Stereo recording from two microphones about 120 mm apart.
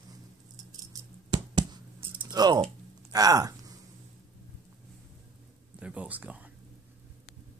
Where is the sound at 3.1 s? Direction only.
30° right (ahead or behind).